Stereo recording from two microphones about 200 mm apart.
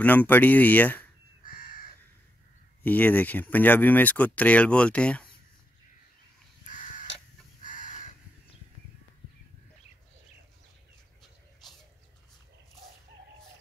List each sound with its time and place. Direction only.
0.0 s speech: 10° left (ahead or behind)
1.4 s crow: 45° left (ahead or behind)
2.8 s speech: 10° left (ahead or behind)
7.6 s crow: 40° left (ahead or behind)